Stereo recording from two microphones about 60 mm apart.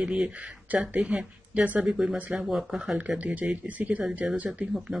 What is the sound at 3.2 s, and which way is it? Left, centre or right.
A woman's voice, right.